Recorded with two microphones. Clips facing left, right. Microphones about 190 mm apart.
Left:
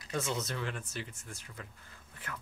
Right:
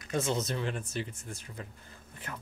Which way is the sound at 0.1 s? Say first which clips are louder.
Right 4 dB; 25° right (ahead or behind).